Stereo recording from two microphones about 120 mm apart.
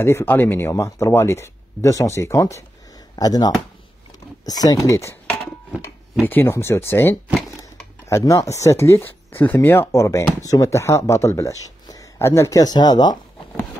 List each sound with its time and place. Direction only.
0.0 s speech: 20° left (ahead or behind)
6.2 s speech: 15° left (ahead or behind); by 13.2 s 35° left (ahead or behind)